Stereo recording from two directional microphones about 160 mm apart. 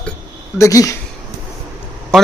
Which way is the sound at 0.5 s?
20° left (ahead or behind).